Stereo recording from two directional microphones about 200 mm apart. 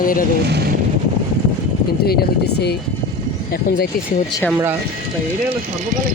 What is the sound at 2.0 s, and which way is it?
Speech, 55° left (ahead or behind).